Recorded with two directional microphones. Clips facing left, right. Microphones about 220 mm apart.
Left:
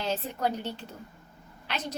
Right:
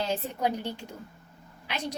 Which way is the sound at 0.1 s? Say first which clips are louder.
Right 1 dB; 10° right (ahead or behind).